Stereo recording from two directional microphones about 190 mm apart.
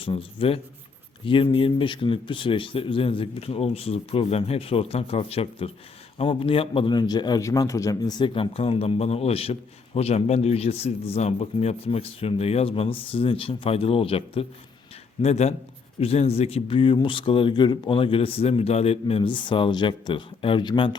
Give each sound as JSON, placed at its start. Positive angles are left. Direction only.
{"t": 0.0, "sound": "a man's voice", "side_deg": 30}